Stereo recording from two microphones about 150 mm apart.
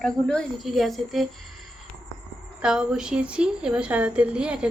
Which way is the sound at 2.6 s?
5° right (ahead or behind).